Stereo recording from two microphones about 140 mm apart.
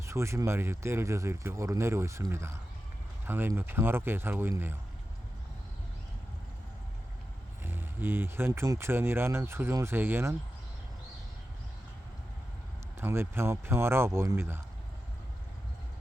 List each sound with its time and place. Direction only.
0.0 s speech: 20° right (ahead or behind)
7.6 s speech: 15° right (ahead or behind)
13.0 s speech: 15° right (ahead or behind)